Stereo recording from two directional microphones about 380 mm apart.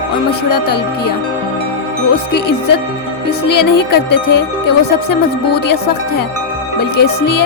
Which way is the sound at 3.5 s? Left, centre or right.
Left.